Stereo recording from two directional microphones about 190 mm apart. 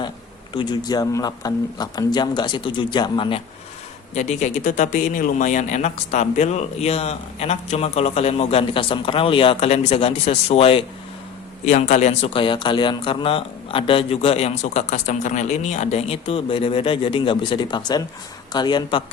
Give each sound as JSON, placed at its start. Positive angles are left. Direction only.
{"t": 0.5, "sound": "speech", "side_deg": 20}
{"t": 4.1, "sound": "speech", "side_deg": 35}